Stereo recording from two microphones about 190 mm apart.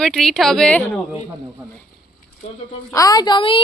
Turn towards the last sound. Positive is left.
turn(degrees=25)  # may be behind; listen again after turning